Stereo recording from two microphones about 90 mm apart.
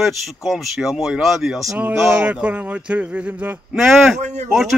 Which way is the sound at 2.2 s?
15° right (ahead or behind).